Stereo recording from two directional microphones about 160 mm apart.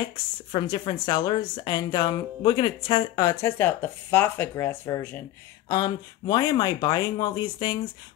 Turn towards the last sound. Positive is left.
turn(degrees=25)  # may be behind; listen again after turning